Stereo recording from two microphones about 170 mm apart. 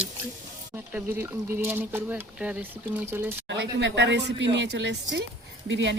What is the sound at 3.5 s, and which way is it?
Speech, 90° right.